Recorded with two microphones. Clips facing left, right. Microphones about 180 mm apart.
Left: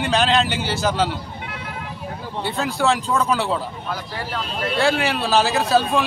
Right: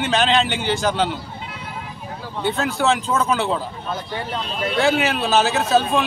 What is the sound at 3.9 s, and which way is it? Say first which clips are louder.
Speech: right 2 dB; 20° right (ahead or behind).